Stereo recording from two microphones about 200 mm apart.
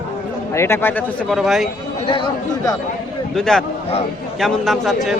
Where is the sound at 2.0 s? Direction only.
25° left (ahead or behind).